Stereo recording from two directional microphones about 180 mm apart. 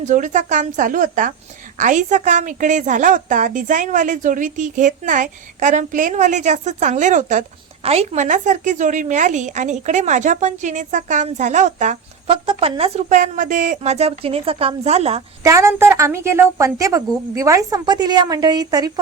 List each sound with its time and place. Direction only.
0.0 s a woman's voice: 45° right (ahead or behind)
12.5 s a woman's voice: 30° right (ahead or behind)
15.4 s a woman's voice: 15° right (ahead or behind)